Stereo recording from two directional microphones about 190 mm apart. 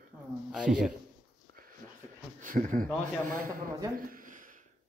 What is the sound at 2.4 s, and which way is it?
Speech, 45° right (ahead or behind).